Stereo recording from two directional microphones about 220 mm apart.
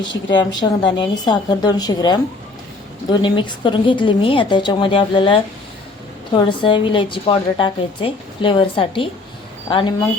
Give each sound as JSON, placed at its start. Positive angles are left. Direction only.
{"t": 0.3, "sound": "a woman's voice", "side_deg": 20}